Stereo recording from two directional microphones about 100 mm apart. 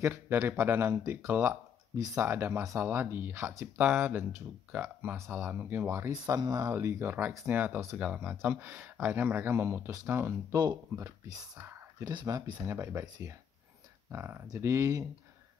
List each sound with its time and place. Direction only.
0.0 s speech: 20° right (ahead or behind); by 6.7 s 35° right (ahead or behind)
6.7 s speech: 25° right (ahead or behind)
10.5 s speech: 40° right (ahead or behind)
12.0 s speech: 45° right (ahead or behind); by 13.0 s 25° right (ahead or behind)
14.1 s speech: 25° right (ahead or behind)